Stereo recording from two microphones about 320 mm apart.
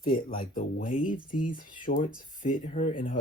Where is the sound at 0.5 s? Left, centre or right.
Left.